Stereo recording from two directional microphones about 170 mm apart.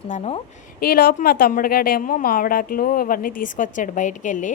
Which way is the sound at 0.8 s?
60° left (ahead or behind).